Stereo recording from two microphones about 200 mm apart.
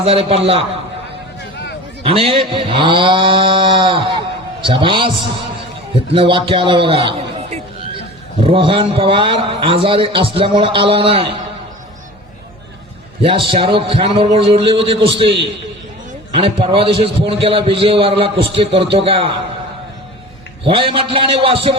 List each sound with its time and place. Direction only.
0.0 s a man's voice: 30° right (ahead or behind)
2.0 s a man's voice: 30° right (ahead or behind)
13.2 s a man's voice: 25° right (ahead or behind)
20.7 s a man's voice: 25° right (ahead or behind)